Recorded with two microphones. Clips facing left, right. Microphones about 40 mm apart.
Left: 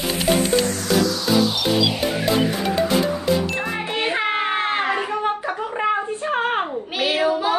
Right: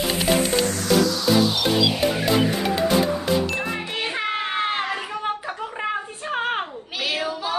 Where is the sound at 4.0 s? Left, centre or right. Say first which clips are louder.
Left 5 dB; left.